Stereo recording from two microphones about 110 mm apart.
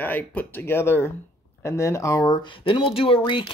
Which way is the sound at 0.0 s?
15° left (ahead or behind).